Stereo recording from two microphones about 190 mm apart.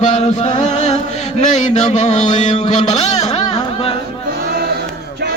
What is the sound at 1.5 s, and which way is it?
Mantra, 40° left (ahead or behind).